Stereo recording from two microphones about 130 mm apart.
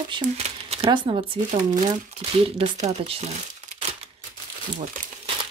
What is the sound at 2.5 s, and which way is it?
Speech, 50° right (ahead or behind).